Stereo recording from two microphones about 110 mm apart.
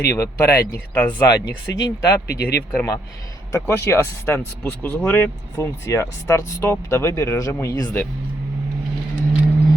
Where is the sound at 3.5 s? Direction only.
25° left (ahead or behind).